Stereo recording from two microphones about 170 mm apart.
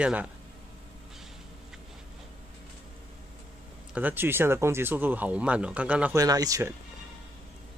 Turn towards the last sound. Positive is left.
turn(degrees=-20)  # may be behind; listen again after turning